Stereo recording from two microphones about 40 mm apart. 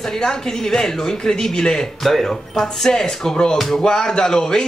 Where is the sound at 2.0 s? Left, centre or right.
Centre.